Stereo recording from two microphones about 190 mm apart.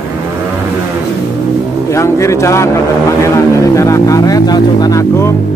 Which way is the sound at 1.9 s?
15° left (ahead or behind).